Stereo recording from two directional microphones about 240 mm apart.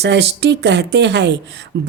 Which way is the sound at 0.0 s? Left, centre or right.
Right.